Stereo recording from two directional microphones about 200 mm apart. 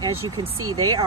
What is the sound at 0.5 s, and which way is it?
Speech, 90° right.